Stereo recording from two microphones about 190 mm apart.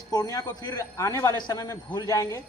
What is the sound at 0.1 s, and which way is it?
Speech, 20° left (ahead or behind).